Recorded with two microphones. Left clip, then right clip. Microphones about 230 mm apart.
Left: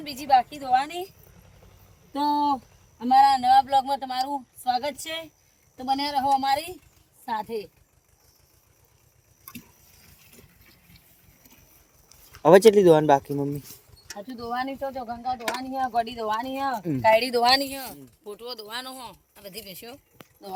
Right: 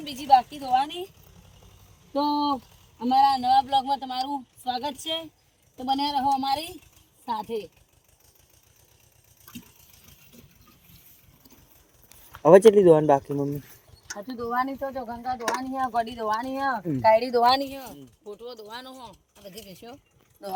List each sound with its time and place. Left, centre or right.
0.0 s speech: centre
2.1 s speech: centre
12.4 s speech: centre
17.4 s speech: centre